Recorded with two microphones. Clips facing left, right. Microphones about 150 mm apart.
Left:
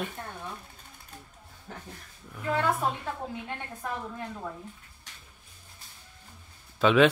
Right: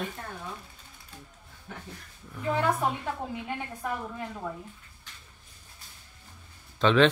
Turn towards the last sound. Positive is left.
turn(degrees=10)  # may be behind; listen again after turning